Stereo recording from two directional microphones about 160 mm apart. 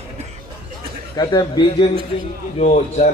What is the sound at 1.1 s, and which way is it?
Speech, 25° left (ahead or behind).